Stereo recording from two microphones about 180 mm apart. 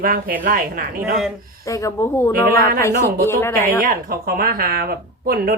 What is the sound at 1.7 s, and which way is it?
A woman's voice, 15° left (ahead or behind).